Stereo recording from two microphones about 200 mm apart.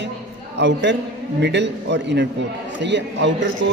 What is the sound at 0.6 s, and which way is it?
A man's voice, 60° right (ahead or behind).